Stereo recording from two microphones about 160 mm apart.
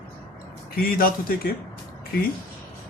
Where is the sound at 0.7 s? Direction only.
65° left (ahead or behind).